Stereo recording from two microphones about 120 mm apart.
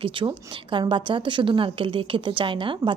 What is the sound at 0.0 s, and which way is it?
A woman's voice, 45° right (ahead or behind).